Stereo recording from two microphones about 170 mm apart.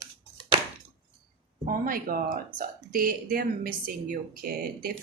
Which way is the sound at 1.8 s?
55° right (ahead or behind).